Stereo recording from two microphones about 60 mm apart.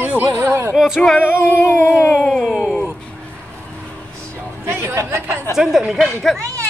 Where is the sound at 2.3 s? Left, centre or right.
Centre.